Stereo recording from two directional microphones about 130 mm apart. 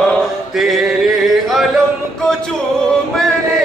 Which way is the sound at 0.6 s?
Centre (ahead or behind).